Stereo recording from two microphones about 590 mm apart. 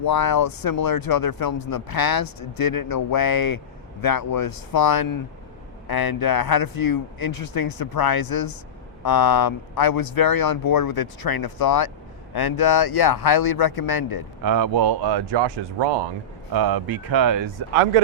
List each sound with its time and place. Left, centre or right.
0.0 s speech: left
14.4 s speech: right